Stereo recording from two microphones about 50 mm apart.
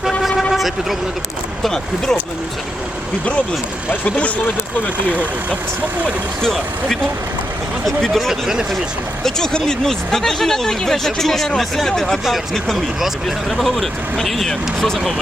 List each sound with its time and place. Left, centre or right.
0.2 s vehicle: centre
0.5 s speech: centre
1.6 s speech: centre
5.0 s speech: right
6.4 s speech: centre
8.3 s speech: centre
9.2 s speech: centre